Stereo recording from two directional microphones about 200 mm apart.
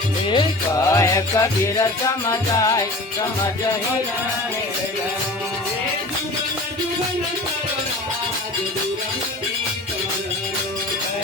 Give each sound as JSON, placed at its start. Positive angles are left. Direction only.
{"t": 0.3, "sound": "music", "side_deg": 20}